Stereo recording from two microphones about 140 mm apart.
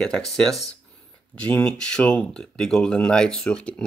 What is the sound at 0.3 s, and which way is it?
Speech, centre (ahead or behind).